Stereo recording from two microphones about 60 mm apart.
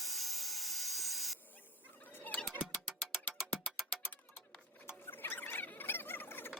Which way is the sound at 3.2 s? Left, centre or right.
Left.